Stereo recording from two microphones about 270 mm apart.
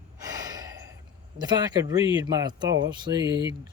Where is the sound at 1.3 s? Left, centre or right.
Centre.